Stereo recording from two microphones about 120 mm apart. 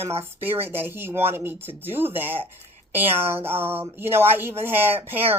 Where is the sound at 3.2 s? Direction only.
55° right (ahead or behind).